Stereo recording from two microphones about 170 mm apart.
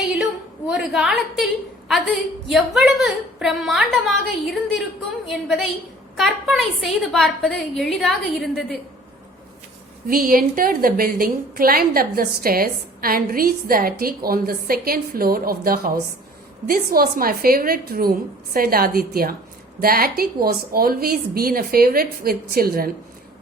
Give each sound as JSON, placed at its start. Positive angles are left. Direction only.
{"t": 0.7, "sound": "a woman's voice", "side_deg": -5}
{"t": 10.1, "sound": "a woman's voice", "side_deg": -55}